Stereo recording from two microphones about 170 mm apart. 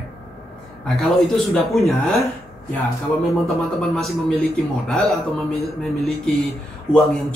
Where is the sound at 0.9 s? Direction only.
Centre (ahead or behind).